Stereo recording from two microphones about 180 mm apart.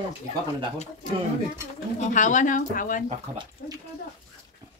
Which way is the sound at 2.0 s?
45° left (ahead or behind).